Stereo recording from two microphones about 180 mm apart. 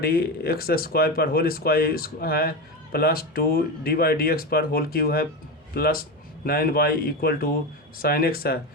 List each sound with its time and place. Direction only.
0.0 s speech: 55° left (ahead or behind)